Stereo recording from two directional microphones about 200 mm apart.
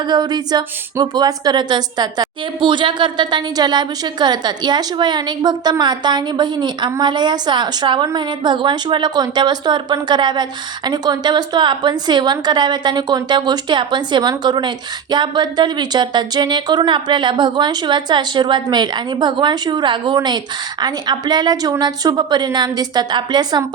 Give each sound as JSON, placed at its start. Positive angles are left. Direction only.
{"t": 0.0, "sound": "speech", "side_deg": -20}